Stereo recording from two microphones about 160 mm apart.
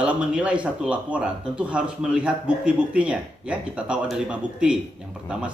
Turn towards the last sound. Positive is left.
turn(degrees=-5)  # may be behind; listen again after turning